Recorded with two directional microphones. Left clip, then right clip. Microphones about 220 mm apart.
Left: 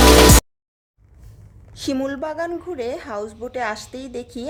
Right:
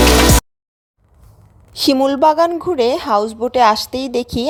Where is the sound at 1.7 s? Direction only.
25° right (ahead or behind).